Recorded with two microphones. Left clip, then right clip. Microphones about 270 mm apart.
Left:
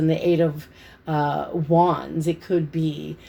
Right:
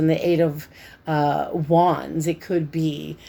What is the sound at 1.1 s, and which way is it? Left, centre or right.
Speech, right.